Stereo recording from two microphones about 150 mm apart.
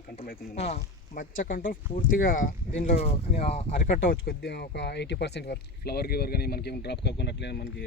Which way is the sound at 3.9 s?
90° left.